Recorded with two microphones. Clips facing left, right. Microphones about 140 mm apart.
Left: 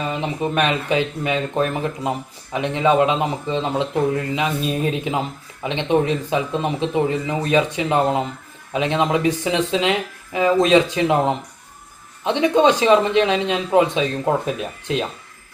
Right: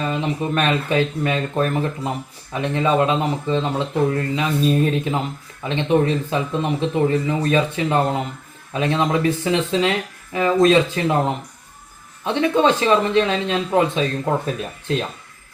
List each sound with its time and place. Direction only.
0.0 s speech: 15° left (ahead or behind)